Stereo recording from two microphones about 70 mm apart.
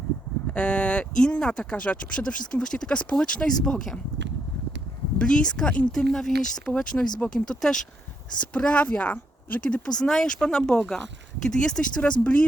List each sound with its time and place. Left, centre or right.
0.5 s speech: centre
5.1 s speech: centre